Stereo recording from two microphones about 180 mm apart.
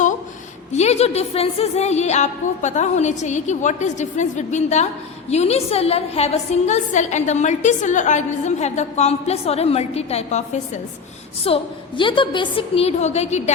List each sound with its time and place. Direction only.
0.7 s a woman's voice: 35° left (ahead or behind)